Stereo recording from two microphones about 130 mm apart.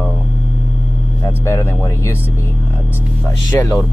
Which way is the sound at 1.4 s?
20° left (ahead or behind).